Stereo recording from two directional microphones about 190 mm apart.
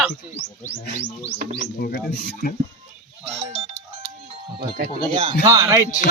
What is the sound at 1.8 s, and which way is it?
Speech, 55° left (ahead or behind).